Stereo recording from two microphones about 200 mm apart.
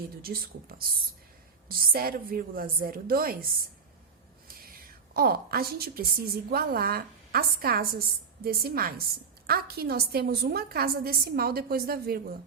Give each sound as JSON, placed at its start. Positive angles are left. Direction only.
{"t": 0.2, "sound": "a woman's voice", "side_deg": -50}